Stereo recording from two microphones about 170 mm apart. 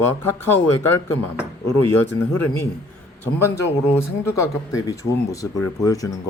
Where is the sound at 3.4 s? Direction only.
15° left (ahead or behind).